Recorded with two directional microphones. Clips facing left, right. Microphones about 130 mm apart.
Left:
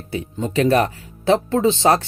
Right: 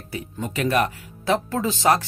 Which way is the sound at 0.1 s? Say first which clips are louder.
Left 6 dB; 25° left (ahead or behind).